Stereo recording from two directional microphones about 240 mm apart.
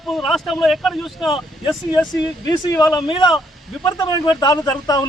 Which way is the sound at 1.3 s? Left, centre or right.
Centre.